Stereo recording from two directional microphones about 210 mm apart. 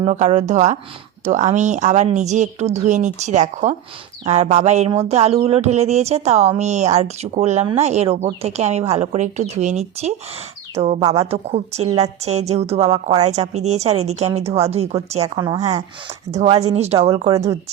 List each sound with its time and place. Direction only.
0.0 s a woman's voice: 30° right (ahead or behind)
16.4 s speech: 30° right (ahead or behind)
17.3 s speech: 15° right (ahead or behind)